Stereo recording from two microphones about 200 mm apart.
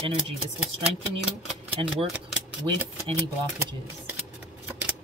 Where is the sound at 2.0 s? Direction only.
5° right (ahead or behind).